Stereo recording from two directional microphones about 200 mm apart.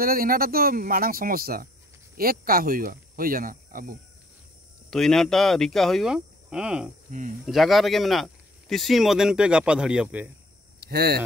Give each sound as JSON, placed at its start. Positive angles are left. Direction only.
{"t": 0.0, "sound": "speech", "side_deg": -45}
{"t": 4.9, "sound": "speech", "side_deg": 0}
{"t": 7.1, "sound": "speech", "side_deg": -40}
{"t": 7.4, "sound": "speech", "side_deg": 0}
{"t": 10.8, "sound": "speech", "side_deg": -55}